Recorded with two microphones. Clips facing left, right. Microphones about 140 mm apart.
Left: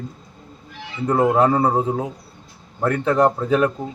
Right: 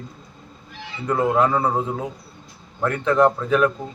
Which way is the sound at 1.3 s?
35° left (ahead or behind).